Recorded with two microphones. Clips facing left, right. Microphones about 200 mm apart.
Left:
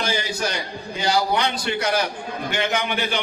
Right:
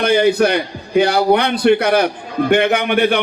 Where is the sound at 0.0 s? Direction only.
60° right (ahead or behind).